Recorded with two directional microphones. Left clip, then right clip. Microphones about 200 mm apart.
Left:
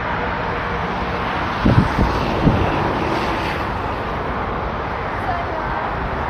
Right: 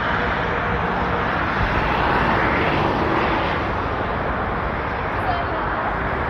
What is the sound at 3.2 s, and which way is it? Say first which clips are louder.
Vehicle: right 1 dB; 25° left (ahead or behind).